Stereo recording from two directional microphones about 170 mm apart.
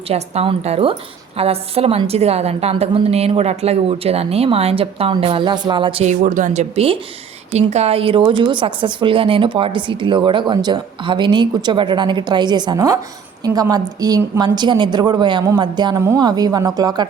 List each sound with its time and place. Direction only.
0.1 s a woman's voice: 35° right (ahead or behind)
6.1 s a woman's voice: 50° right (ahead or behind); by 17.1 s 25° right (ahead or behind)